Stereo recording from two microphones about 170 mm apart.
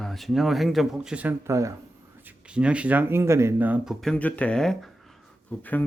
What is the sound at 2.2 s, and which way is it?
Speech, 5° right (ahead or behind).